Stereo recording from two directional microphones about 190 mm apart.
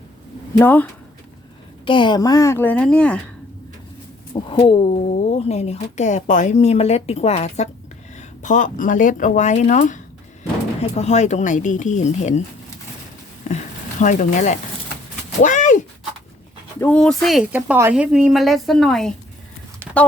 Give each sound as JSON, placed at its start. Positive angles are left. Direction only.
{"t": 0.6, "sound": "a woman's voice", "side_deg": 10}
{"t": 1.8, "sound": "a woman's voice", "side_deg": 25}
{"t": 4.4, "sound": "speech", "side_deg": 25}
{"t": 13.5, "sound": "speech", "side_deg": 40}
{"t": 15.4, "sound": "a sound", "side_deg": 40}
{"t": 16.8, "sound": "speech", "side_deg": 5}
{"t": 19.8, "sound": "a sound", "side_deg": -10}